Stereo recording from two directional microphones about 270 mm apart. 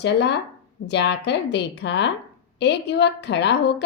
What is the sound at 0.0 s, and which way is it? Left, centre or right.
A woman's voice, left.